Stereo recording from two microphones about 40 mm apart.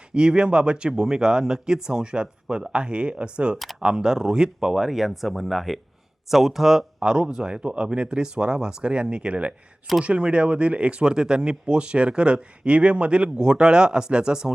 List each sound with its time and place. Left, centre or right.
0.1 s speech: right